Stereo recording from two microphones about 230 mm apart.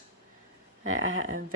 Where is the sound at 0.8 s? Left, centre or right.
Right.